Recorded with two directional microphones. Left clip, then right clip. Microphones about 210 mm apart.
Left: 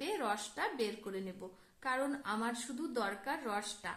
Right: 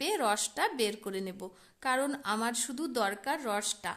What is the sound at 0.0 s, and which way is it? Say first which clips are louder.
A woman's voice: right 7 dB; 50° right (ahead or behind).